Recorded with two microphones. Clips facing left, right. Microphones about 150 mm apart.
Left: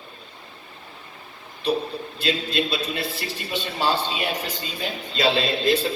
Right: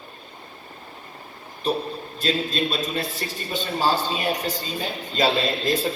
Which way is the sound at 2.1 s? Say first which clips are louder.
Even; 45° right (ahead or behind).